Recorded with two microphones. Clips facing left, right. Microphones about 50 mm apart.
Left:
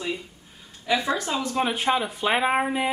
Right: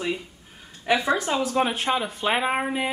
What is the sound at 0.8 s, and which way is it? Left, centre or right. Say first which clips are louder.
Speech: right 2 dB; right.